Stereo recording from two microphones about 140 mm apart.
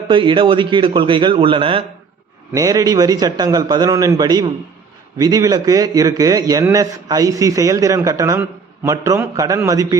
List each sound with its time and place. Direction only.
0.1 s a man's voice: 35° right (ahead or behind)
2.5 s a man's voice: 25° right (ahead or behind)